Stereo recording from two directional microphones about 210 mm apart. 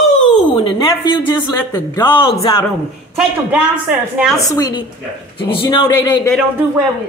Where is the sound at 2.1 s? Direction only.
25° left (ahead or behind).